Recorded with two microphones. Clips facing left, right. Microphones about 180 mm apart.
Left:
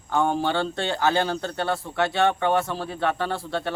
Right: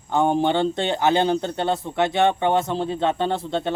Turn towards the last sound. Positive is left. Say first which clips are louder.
# right 4 dB
turn(degrees=-20)  # may be behind; listen again after turning